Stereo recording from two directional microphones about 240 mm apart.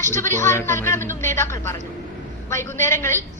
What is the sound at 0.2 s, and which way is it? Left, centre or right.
A woman's voice, centre.